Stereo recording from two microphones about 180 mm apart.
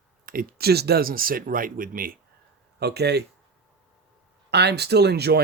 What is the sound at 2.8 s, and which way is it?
Speech, 65° right (ahead or behind).